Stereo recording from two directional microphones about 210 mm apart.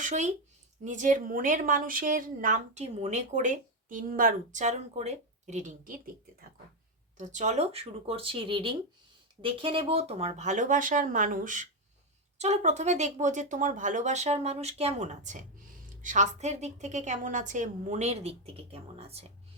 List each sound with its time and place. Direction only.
0.0 s a woman's voice: 35° right (ahead or behind)
7.2 s a woman's voice: 35° right (ahead or behind)